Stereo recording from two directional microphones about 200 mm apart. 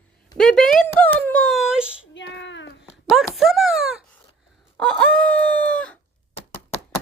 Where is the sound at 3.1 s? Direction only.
Centre (ahead or behind).